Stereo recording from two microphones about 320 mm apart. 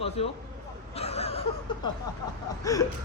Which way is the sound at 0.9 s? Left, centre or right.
Centre.